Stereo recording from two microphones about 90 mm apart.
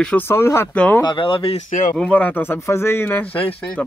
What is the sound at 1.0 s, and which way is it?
Speech, 65° left (ahead or behind).